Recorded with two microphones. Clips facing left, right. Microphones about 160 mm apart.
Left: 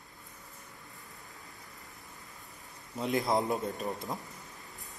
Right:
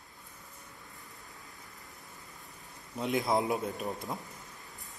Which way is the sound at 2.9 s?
Centre (ahead or behind).